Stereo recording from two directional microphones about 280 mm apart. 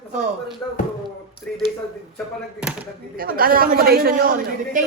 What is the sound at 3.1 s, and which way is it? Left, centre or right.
Speech, right.